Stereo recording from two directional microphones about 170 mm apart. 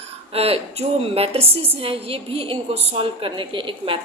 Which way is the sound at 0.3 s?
35° right (ahead or behind).